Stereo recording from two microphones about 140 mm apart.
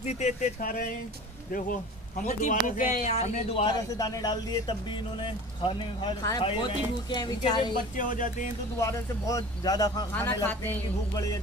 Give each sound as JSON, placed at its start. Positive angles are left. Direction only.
{"t": 0.2, "sound": "speech", "side_deg": 70}
{"t": 3.7, "sound": "speech", "side_deg": 30}
{"t": 8.0, "sound": "speech", "side_deg": 70}
{"t": 8.7, "sound": "speech", "side_deg": 20}
{"t": 10.1, "sound": "speech", "side_deg": 15}